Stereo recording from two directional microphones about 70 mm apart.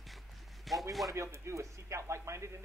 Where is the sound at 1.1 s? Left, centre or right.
Right.